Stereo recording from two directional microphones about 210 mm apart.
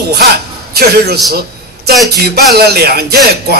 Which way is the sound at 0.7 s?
50° right (ahead or behind).